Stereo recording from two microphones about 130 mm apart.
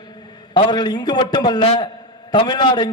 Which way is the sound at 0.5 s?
30° left (ahead or behind).